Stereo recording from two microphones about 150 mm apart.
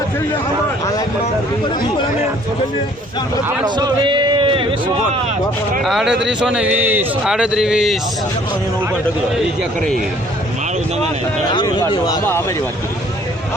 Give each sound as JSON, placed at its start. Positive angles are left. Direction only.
{"t": 3.6, "sound": "a man's voice", "side_deg": -25}
{"t": 5.8, "sound": "a man's voice", "side_deg": -5}
{"t": 11.5, "sound": "speech", "side_deg": 30}